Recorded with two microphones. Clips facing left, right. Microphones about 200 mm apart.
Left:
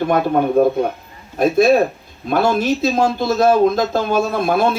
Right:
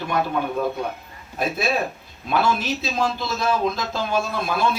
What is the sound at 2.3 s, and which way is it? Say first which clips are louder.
Speech: left 6 dB; 50° left (ahead or behind).